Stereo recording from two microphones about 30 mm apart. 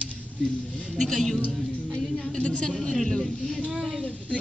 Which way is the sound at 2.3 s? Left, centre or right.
Left.